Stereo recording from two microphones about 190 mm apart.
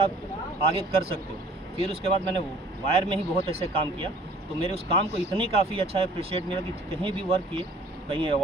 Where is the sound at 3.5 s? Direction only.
30° right (ahead or behind).